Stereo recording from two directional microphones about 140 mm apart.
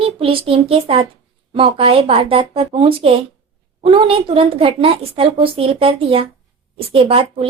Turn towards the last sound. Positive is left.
turn(degrees=-40)  # may be behind; listen again after turning